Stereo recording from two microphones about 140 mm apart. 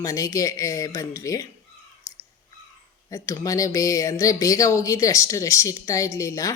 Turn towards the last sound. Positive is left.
turn(degrees=25)  # may be behind; listen again after turning